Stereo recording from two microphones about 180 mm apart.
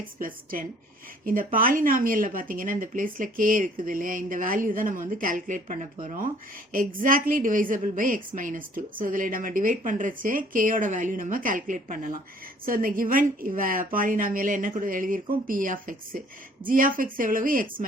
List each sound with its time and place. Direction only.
0.0 s a woman's voice: 50° right (ahead or behind)